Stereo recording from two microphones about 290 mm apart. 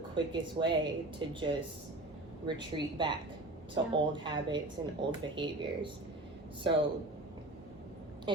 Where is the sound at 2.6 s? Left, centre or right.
Centre.